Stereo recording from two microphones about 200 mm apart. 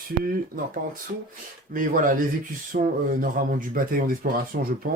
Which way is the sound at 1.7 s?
45° right (ahead or behind).